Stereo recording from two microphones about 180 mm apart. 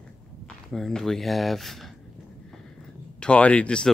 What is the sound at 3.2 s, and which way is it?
Speech, 5° left (ahead or behind).